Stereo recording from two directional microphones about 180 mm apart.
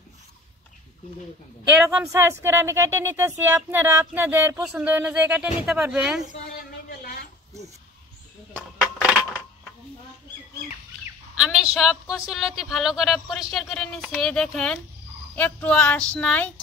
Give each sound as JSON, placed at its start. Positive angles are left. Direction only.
{"t": 1.9, "sound": "a woman's voice", "side_deg": -15}
{"t": 6.9, "sound": "a sound", "side_deg": 55}
{"t": 11.3, "sound": "a woman's voice", "side_deg": -5}